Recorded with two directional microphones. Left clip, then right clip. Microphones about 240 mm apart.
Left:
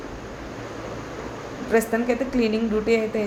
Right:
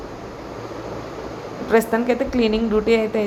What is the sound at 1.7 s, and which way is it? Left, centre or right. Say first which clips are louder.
A woman's voice: right 4 dB; centre.